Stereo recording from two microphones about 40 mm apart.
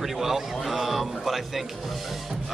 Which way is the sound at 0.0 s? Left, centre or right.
Centre.